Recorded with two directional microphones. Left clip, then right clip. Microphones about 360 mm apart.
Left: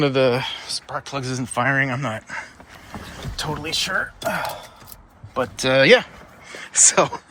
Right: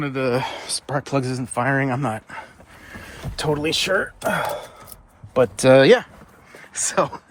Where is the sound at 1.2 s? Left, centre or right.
Centre.